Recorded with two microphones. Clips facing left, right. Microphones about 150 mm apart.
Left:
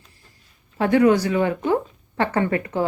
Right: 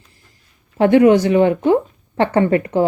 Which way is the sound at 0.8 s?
20° right (ahead or behind).